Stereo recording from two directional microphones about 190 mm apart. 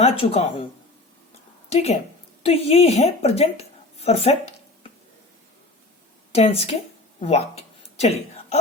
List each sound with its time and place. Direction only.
0.0 s speech: 30° left (ahead or behind)
1.7 s a woman's voice: 35° left (ahead or behind)
6.3 s speech: 30° left (ahead or behind)